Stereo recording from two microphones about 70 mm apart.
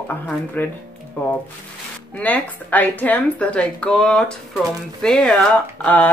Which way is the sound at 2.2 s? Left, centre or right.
Left.